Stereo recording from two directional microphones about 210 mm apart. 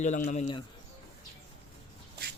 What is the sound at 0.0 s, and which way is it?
Speech, 35° left (ahead or behind).